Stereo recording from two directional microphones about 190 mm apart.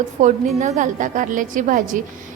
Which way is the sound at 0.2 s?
40° right (ahead or behind).